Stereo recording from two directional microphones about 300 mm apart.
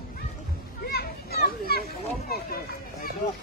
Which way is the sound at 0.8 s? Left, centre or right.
Left.